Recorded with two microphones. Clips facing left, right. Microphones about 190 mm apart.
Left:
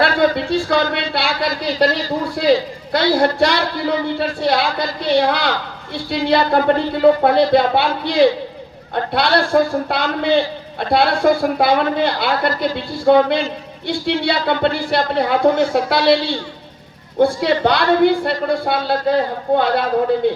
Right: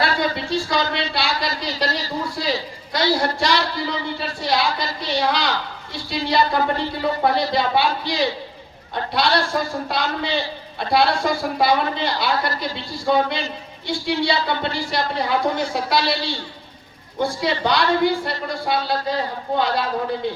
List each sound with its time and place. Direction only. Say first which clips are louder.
0.0 s a woman's voice: left 6 dB; 55° left (ahead or behind)
17.2 s a woman's voice: left 7 dB; 60° left (ahead or behind)